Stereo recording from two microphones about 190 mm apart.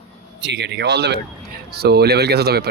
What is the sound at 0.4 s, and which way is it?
Speech, 65° right (ahead or behind).